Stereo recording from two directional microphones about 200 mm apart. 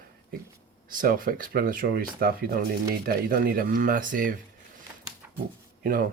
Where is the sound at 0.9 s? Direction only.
45° right (ahead or behind).